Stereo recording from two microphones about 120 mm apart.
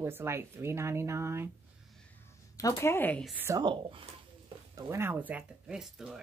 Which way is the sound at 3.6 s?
45° right (ahead or behind).